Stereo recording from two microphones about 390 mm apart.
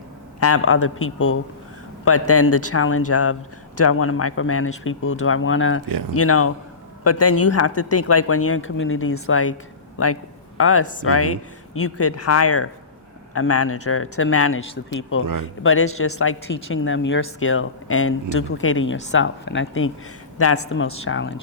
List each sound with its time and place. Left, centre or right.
0.3 s speech: left
10.6 s speech: left
15.6 s speech: left